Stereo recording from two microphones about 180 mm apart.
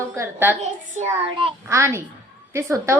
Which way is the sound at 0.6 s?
40° right (ahead or behind).